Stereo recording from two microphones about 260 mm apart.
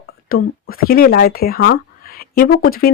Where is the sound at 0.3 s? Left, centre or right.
Left.